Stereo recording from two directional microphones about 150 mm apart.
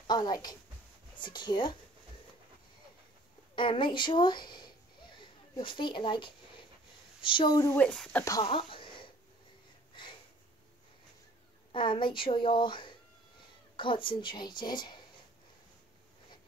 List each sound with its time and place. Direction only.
0.0 s a woman's voice: 25° left (ahead or behind)
3.5 s a woman's voice: 35° left (ahead or behind)
7.7 s speech: 5° left (ahead or behind)
8.5 s a sound: 35° left (ahead or behind)
11.7 s a woman's voice: 35° left (ahead or behind)